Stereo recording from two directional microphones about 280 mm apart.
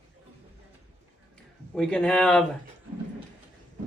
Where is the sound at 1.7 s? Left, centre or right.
Centre.